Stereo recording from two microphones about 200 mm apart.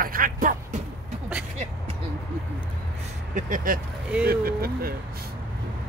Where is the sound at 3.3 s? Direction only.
45° right (ahead or behind).